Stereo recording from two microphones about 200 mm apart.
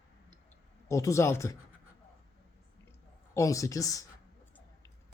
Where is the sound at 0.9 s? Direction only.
15° left (ahead or behind).